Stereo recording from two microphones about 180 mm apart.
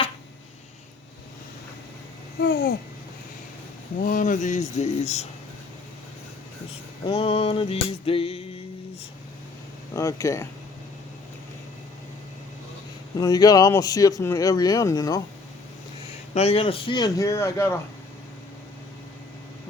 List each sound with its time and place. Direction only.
2.4 s babbling: 65° left (ahead or behind)
4.0 s speech: 45° left (ahead or behind)
7.0 s a sound: 35° left (ahead or behind)
9.9 s speech: 20° left (ahead or behind)
13.1 s speech: 20° left (ahead or behind)
16.3 s speech: 35° left (ahead or behind); by 17.7 s 15° left (ahead or behind)